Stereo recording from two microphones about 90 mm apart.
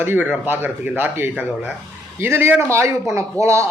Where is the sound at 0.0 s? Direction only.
25° right (ahead or behind).